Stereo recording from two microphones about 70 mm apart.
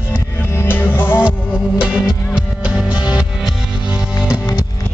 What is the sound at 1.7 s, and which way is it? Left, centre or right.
Music, centre.